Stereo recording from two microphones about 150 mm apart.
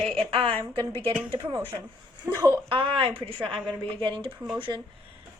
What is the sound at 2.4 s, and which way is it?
Speech, 20° right (ahead or behind).